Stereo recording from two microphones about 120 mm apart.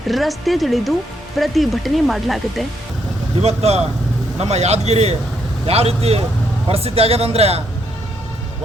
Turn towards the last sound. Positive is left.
turn(degrees=-60)  # may be behind; listen again after turning